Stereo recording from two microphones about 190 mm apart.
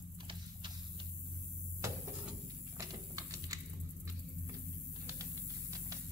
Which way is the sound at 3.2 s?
20° right (ahead or behind).